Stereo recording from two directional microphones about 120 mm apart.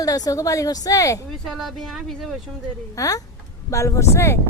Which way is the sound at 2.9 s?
25° left (ahead or behind).